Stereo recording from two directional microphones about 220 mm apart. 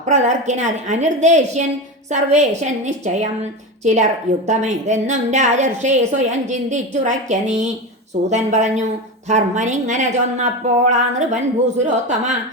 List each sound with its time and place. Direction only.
0.0 s a woman's voice: 35° right (ahead or behind)